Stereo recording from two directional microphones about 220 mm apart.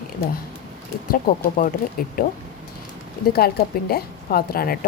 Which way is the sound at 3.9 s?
45° left (ahead or behind).